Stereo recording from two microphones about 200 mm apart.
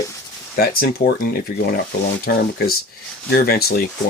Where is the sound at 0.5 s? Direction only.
50° left (ahead or behind).